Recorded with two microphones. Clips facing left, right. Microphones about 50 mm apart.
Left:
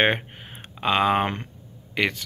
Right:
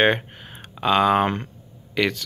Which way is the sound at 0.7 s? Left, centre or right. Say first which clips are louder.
Right 3 dB; centre.